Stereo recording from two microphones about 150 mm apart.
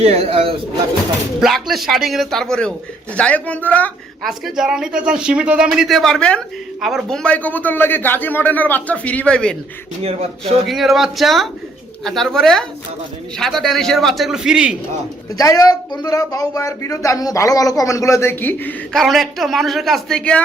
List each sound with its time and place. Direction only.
0.0 s speech: 40° right (ahead or behind)
1.4 s a man's voice: centre (ahead or behind)
4.3 s a man's voice: centre (ahead or behind)
10.0 s speech: 40° right (ahead or behind)
10.7 s a man's voice: centre (ahead or behind)
15.4 s speech: 25° left (ahead or behind)
18.9 s a man's voice: centre (ahead or behind)